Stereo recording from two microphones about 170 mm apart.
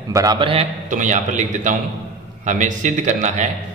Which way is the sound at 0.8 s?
45° right (ahead or behind).